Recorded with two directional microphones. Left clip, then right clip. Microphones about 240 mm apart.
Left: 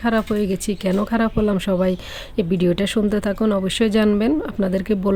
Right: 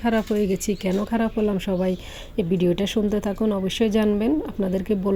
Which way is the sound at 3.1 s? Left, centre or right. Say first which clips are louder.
Left 4 dB; centre.